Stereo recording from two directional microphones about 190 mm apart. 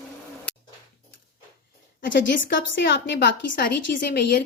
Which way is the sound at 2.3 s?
70° left (ahead or behind).